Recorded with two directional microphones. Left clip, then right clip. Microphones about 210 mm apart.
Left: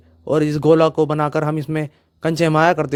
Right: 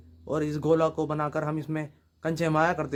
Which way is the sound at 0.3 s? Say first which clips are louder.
Left 11 dB; 40° left (ahead or behind).